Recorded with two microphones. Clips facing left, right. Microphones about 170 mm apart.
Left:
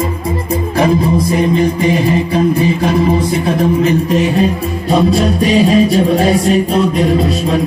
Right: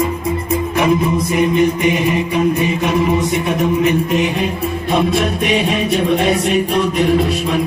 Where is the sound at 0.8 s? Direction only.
30° left (ahead or behind).